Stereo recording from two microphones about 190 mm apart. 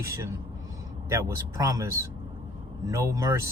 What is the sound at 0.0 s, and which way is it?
Speech, 15° right (ahead or behind).